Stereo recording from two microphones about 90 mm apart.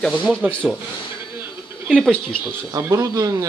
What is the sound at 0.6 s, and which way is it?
Speech, 10° right (ahead or behind).